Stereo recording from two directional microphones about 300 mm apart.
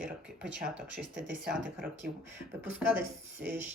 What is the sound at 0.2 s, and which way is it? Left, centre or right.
Speech, centre.